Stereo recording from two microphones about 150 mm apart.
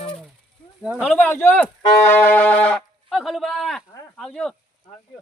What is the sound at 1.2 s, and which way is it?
Music, 15° left (ahead or behind).